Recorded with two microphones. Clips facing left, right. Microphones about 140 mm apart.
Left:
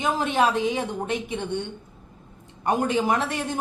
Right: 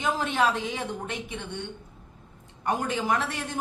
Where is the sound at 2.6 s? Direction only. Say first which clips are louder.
Left 5 dB; 20° left (ahead or behind).